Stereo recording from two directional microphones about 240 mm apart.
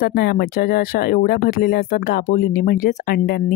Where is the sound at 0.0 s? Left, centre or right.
Left.